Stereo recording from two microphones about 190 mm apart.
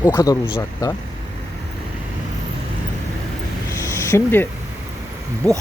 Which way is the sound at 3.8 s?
15° left (ahead or behind).